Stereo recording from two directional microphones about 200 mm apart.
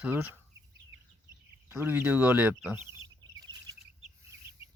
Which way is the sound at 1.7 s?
10° right (ahead or behind).